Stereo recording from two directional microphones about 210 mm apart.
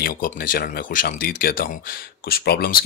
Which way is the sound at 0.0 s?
45° left (ahead or behind).